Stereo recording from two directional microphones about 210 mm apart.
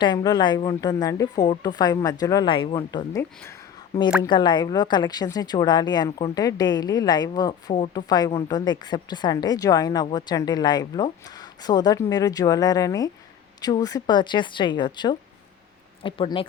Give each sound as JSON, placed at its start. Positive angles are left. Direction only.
{"t": 0.0, "sound": "a woman's voice", "side_deg": 20}
{"t": 4.2, "sound": "a woman's voice", "side_deg": 20}